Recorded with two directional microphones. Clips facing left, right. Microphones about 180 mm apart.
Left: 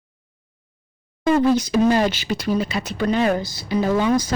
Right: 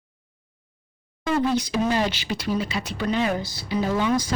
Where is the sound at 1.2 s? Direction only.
45° left (ahead or behind).